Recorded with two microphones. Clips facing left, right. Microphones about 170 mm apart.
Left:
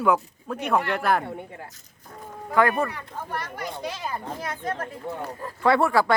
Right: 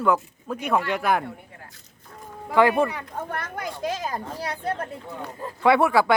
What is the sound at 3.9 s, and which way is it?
Speech, 40° right (ahead or behind).